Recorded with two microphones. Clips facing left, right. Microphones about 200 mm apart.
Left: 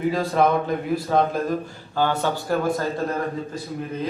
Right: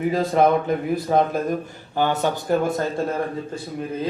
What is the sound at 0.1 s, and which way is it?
Speech, 20° right (ahead or behind).